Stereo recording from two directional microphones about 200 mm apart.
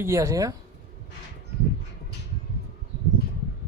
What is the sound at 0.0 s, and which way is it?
Speech, 15° right (ahead or behind).